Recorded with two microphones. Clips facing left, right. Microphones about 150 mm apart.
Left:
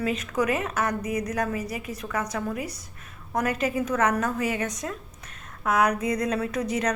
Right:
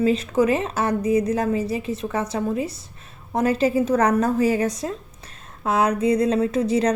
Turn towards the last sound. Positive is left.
turn(degrees=-30)  # may be behind; listen again after turning